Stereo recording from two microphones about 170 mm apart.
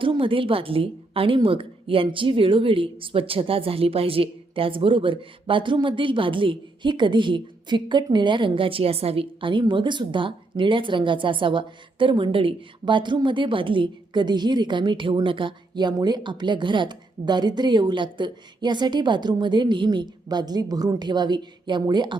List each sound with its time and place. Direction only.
0.0 s a woman's voice: 30° right (ahead or behind)